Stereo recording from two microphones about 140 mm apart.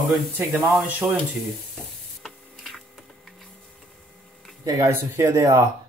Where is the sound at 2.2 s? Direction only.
Centre (ahead or behind).